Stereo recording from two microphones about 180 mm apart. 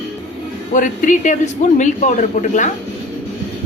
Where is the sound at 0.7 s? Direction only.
45° left (ahead or behind).